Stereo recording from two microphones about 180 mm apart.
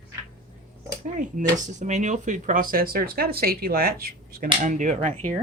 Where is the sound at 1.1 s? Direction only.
45° right (ahead or behind).